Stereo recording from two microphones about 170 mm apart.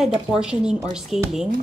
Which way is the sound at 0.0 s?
5° right (ahead or behind).